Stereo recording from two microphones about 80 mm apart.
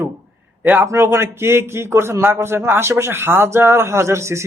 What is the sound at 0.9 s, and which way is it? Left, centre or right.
A man's voice, right.